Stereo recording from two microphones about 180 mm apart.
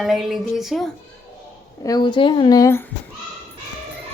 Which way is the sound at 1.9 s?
25° left (ahead or behind).